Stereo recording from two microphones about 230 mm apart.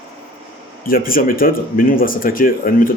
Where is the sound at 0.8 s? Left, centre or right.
Left.